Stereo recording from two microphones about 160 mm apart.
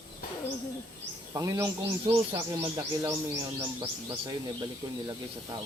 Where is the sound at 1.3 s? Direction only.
20° right (ahead or behind).